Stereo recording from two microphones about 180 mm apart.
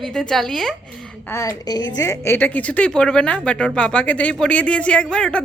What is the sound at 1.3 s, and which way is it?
A woman's voice, 20° left (ahead or behind).